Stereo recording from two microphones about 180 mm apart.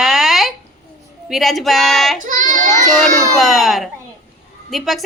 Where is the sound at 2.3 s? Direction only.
45° right (ahead or behind).